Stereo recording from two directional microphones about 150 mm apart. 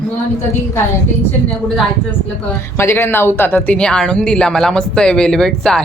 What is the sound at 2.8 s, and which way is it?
Speech, 15° left (ahead or behind).